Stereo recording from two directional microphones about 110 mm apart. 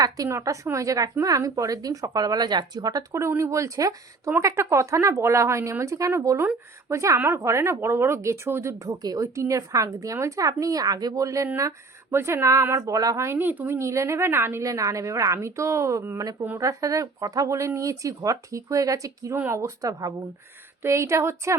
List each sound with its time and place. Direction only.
0.0 s speech: 30° right (ahead or behind)